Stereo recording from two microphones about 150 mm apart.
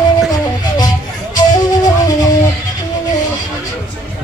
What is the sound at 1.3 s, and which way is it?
Music, 25° left (ahead or behind).